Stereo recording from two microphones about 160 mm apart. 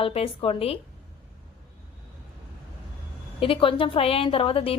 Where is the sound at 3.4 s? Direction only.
35° left (ahead or behind).